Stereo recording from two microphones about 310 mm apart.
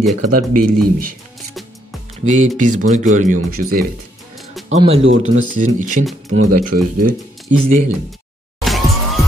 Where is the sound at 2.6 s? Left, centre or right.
Right.